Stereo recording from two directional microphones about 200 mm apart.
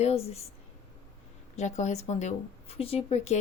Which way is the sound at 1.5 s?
35° left (ahead or behind).